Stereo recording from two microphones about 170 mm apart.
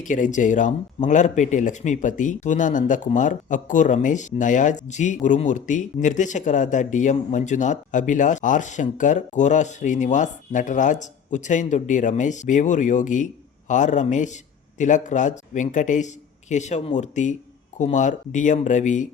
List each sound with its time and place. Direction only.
0.0 s speech: 50° left (ahead or behind)